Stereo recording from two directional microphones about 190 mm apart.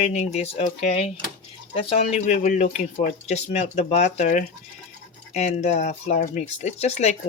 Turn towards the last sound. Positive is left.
turn(degrees=35)  # may be behind; listen again after turning